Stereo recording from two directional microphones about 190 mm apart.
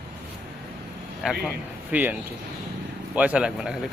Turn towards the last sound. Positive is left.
turn(degrees=-5)  # may be behind; listen again after turning